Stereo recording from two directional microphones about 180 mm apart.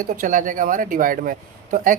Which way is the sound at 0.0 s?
45° right (ahead or behind).